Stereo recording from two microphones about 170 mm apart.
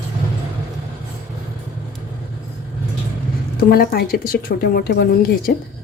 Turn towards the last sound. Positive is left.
turn(degrees=60)  # may be behind; listen again after turning